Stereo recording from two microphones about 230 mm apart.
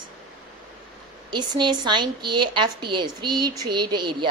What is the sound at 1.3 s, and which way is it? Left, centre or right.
A woman's voice, centre.